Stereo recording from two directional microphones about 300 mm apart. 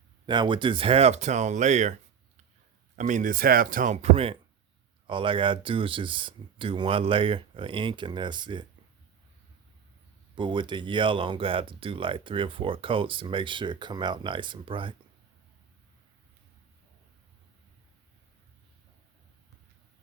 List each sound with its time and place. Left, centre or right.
0.3 s speech: centre
10.3 s speech: centre